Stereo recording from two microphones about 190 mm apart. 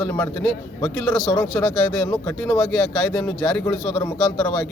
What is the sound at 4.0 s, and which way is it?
Speech, 20° left (ahead or behind).